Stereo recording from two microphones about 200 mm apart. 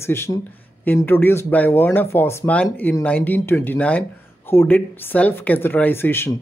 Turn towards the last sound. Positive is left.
turn(degrees=10)  # may be behind; listen again after turning